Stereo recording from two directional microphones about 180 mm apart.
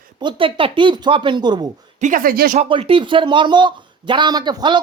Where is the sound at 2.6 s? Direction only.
30° right (ahead or behind).